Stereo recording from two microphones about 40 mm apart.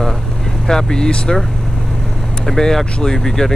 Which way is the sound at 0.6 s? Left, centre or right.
Centre.